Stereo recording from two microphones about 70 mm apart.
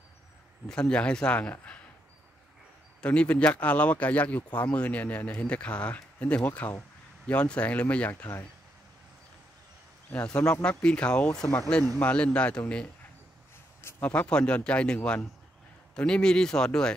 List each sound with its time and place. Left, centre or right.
0.7 s speech: centre
3.0 s speech: centre
8.1 s speech: left
10.2 s speech: centre
13.7 s a sound: left
14.0 s speech: centre